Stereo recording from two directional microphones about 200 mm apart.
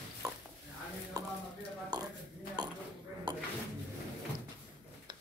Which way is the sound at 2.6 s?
20° right (ahead or behind).